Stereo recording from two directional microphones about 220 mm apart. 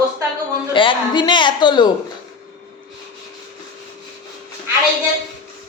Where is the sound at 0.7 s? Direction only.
20° left (ahead or behind).